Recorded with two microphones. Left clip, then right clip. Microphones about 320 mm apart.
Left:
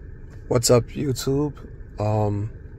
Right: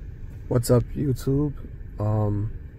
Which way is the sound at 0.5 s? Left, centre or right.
Left.